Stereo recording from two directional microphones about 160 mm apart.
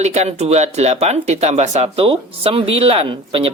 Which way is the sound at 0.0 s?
45° right (ahead or behind).